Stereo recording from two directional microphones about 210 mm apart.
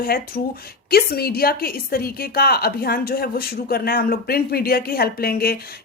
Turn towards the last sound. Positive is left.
turn(degrees=45)  # may be behind; listen again after turning